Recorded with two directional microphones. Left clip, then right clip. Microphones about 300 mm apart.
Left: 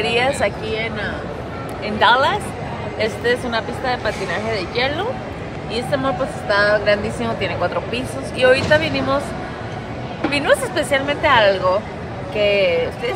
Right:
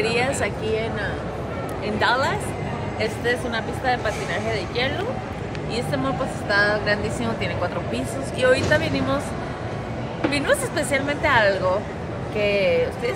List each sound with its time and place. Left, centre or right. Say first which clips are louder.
0.0 s a woman's voice: left 4 dB; centre
2.0 s a woman's voice: left 7 dB; centre
10.3 s a woman's voice: left 6 dB; centre